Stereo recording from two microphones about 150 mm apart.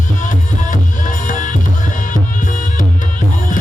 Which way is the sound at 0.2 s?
55° left (ahead or behind).